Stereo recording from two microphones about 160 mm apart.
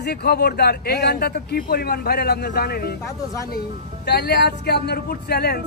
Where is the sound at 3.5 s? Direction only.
90° left.